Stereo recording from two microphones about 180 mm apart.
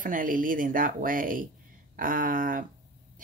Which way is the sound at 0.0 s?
50° right (ahead or behind).